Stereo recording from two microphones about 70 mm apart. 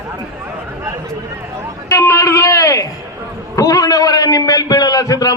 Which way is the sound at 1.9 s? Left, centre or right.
Left.